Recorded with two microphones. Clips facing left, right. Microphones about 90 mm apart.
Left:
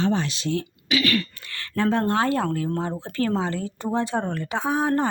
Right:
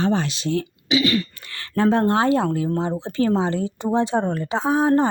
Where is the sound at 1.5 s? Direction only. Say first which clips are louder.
Right 4 dB; 35° right (ahead or behind).